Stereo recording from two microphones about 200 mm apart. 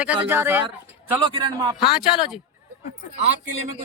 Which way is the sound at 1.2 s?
25° right (ahead or behind).